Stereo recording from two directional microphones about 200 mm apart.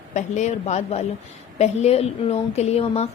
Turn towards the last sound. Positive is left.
turn(degrees=30)  # may be behind; listen again after turning